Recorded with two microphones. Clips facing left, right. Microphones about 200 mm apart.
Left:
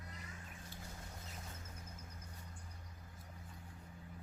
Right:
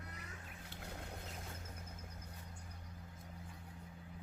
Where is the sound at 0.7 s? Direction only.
65° right (ahead or behind).